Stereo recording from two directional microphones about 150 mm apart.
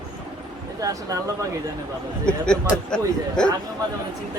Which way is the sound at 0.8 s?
25° right (ahead or behind).